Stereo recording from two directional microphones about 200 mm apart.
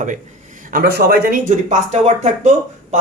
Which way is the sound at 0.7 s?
50° right (ahead or behind).